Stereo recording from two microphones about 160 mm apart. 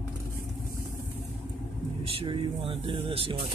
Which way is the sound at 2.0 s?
35° right (ahead or behind).